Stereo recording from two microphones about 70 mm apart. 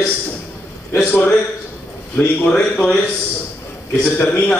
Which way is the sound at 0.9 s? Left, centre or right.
Left.